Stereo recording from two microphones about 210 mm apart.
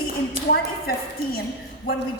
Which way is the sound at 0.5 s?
45° left (ahead or behind).